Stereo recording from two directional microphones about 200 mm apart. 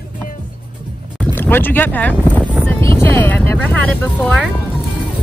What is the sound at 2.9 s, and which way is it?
Vehicle, 10° left (ahead or behind).